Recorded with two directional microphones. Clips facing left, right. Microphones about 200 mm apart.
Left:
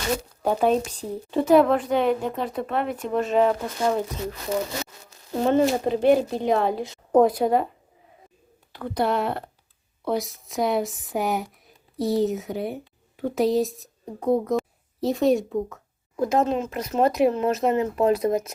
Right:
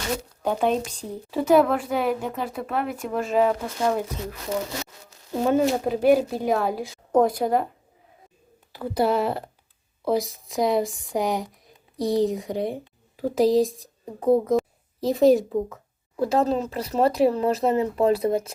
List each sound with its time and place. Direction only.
0.4 s a woman's voice: 5° left (ahead or behind)
5.5 s a woman's voice: 5° right (ahead or behind)
8.7 s a woman's voice: 5° right (ahead or behind)
16.1 s speech: 30° right (ahead or behind)